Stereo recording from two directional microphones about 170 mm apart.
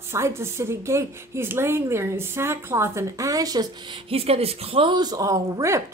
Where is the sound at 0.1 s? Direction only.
15° right (ahead or behind).